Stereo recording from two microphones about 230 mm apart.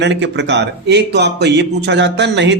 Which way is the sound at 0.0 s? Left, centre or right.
Right.